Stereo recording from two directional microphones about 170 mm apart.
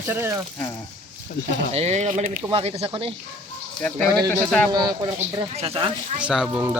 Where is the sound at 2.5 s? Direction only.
35° right (ahead or behind).